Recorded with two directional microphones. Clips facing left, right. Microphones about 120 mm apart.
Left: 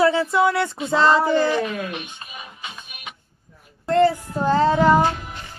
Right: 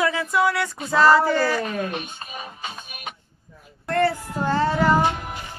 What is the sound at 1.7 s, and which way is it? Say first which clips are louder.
Speech: right 1 dB; 40° right (ahead or behind).